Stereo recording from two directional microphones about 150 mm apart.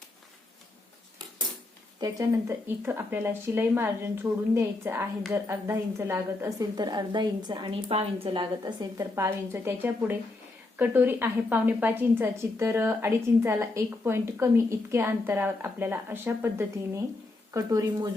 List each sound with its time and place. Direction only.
2.0 s a woman's voice: 25° right (ahead or behind)